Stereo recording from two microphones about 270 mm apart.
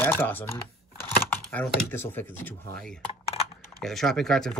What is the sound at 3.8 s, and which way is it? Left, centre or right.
Speech, centre.